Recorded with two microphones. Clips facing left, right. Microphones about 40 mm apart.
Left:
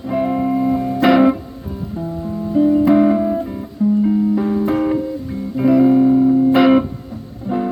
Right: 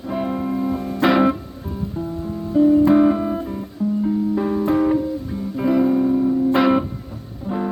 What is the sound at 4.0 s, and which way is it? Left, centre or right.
Music, left.